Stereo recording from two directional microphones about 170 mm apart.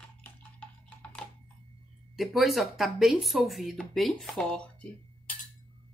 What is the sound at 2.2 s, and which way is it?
Speech, centre (ahead or behind).